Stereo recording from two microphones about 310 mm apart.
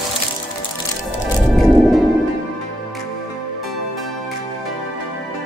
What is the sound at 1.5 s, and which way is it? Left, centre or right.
Music, centre.